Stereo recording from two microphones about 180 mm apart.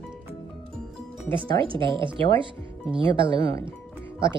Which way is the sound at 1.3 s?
30° right (ahead or behind).